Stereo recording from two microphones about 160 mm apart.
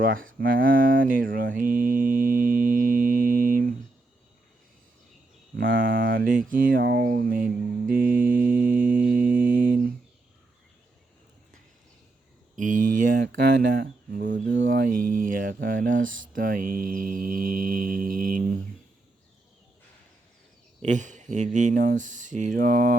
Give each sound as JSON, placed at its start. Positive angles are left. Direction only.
{"t": 0.0, "sound": "speech", "side_deg": -65}
{"t": 5.5, "sound": "a sound", "side_deg": -60}
{"t": 9.3, "sound": "mantra", "side_deg": -60}
{"t": 12.5, "sound": "speech", "side_deg": -55}
{"t": 20.8, "sound": "speech", "side_deg": -50}